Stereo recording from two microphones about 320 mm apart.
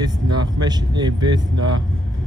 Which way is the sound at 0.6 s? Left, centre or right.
Centre.